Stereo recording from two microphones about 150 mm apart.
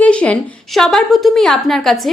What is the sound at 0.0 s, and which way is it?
A woman's voice, 10° left (ahead or behind).